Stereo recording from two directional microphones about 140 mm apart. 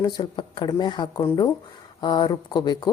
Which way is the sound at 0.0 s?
30° left (ahead or behind).